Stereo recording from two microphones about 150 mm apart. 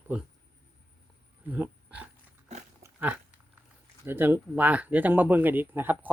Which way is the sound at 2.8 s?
10° right (ahead or behind).